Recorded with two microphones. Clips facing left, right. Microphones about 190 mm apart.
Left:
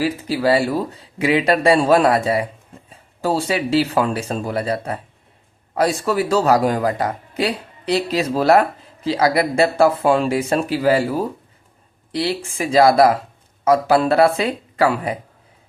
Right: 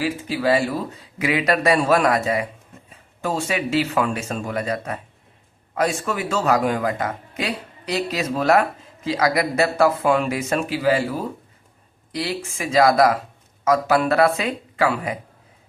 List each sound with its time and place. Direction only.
0.0 s speech: 35° left (ahead or behind)
12.1 s speech: 30° left (ahead or behind)